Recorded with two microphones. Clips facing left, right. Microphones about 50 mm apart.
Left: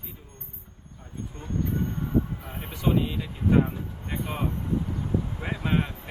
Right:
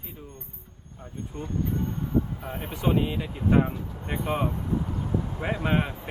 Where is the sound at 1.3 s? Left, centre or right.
Right.